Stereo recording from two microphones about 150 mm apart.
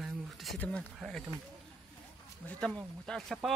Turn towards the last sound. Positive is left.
turn(degrees=5)  # may be behind; listen again after turning